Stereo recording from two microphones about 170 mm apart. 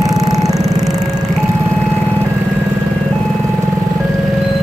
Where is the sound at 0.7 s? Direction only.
20° right (ahead or behind).